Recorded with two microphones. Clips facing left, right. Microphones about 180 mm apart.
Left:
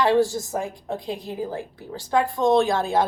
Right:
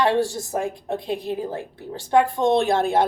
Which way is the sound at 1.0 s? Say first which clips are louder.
Right 4 dB; 65° right (ahead or behind).